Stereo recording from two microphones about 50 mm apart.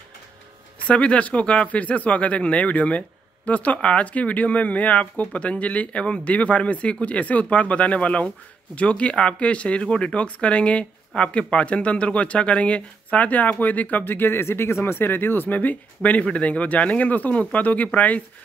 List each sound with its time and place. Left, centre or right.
0.8 s speech: left